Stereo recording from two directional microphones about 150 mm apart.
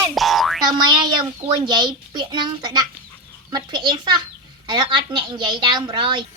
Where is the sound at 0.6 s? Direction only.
30° right (ahead or behind).